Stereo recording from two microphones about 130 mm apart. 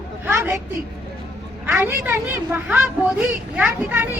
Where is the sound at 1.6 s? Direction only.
15° right (ahead or behind).